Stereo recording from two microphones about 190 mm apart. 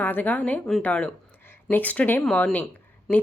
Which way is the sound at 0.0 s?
10° left (ahead or behind).